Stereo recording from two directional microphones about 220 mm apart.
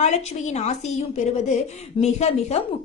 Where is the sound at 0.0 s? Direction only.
30° left (ahead or behind).